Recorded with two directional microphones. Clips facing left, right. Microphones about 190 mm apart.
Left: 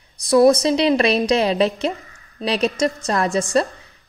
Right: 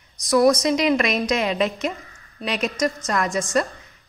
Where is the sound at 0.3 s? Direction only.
30° left (ahead or behind).